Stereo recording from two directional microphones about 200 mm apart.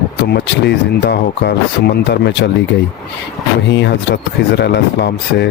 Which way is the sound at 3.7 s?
60° left (ahead or behind).